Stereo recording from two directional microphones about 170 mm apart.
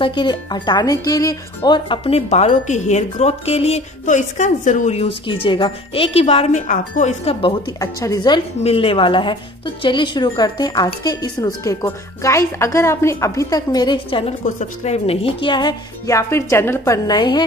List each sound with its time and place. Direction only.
0.0 s speech: 30° left (ahead or behind)
7.8 s speech: 20° left (ahead or behind)
8.5 s speech: 35° left (ahead or behind)
14.4 s speech: 45° left (ahead or behind); by 17.4 s 25° left (ahead or behind)